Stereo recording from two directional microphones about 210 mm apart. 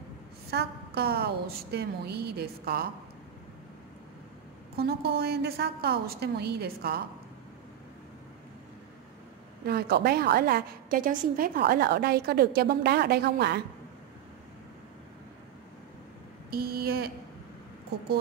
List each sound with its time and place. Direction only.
0.5 s a woman's voice: 50° right (ahead or behind)
4.7 s a woman's voice: 50° right (ahead or behind)
9.7 s a woman's voice: 50° right (ahead or behind)
16.4 s a woman's voice: 45° right (ahead or behind)